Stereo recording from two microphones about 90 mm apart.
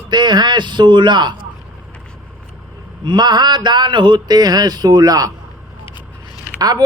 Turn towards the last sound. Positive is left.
turn(degrees=-45)  # may be behind; listen again after turning